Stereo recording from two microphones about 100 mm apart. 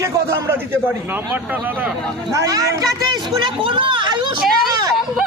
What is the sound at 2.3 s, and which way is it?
Speech, 35° right (ahead or behind).